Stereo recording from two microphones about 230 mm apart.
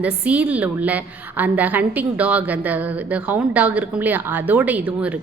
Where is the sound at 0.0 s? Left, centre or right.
Centre.